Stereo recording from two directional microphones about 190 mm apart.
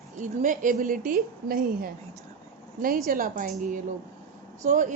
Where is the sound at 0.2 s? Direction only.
45° right (ahead or behind).